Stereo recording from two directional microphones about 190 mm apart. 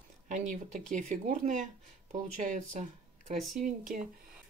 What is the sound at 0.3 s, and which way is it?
Speech, 40° right (ahead or behind).